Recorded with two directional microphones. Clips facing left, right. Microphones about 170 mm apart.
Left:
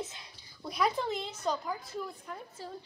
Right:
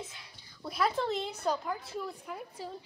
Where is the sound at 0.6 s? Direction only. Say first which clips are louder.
Even; centre (ahead or behind).